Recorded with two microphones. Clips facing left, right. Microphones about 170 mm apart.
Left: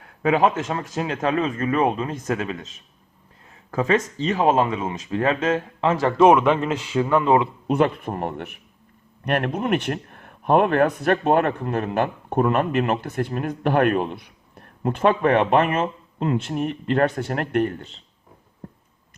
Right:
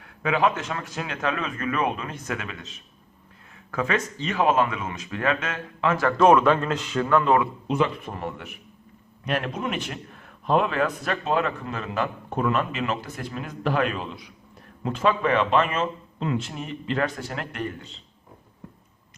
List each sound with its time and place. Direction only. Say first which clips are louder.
0.0 s a man's voice: left 4 dB; 40° left (ahead or behind)
3.7 s a man's voice: left 5 dB; 35° left (ahead or behind)
5.9 s a man's voice: left 2 dB; 25° left (ahead or behind)
7.7 s a man's voice: left 5 dB; 55° left (ahead or behind)